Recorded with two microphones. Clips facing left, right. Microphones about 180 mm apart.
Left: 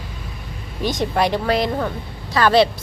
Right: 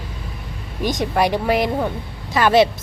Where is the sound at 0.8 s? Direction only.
15° right (ahead or behind).